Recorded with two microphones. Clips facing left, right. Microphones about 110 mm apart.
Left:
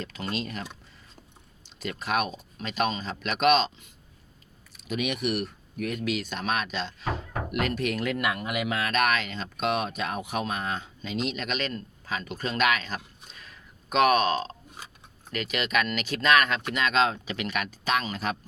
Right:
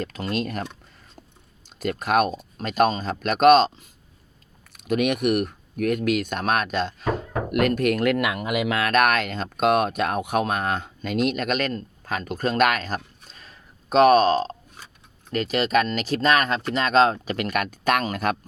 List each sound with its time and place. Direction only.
0.0 s speech: 45° right (ahead or behind)
4.7 s speech: 55° right (ahead or behind)
8.1 s speech: 90° right; by 18.3 s 55° right (ahead or behind)